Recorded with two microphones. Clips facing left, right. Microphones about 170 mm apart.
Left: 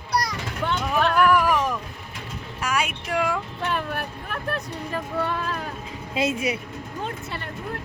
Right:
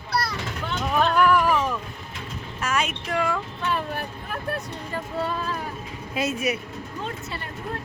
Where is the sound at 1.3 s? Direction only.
10° left (ahead or behind).